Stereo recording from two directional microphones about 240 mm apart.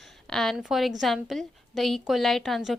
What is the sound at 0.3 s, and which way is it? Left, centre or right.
Speech, centre.